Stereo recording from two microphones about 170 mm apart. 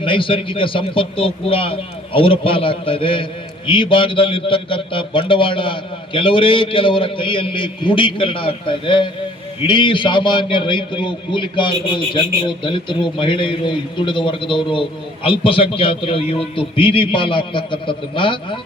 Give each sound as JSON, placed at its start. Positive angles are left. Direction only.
{"t": 0.0, "sound": "a man's voice", "side_deg": 30}